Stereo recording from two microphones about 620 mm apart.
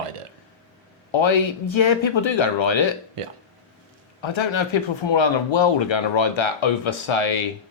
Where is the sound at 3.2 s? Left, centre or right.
Right.